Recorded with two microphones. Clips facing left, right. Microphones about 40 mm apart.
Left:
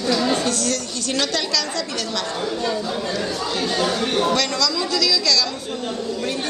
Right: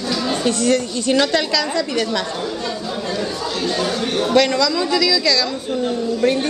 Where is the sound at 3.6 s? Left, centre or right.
Centre.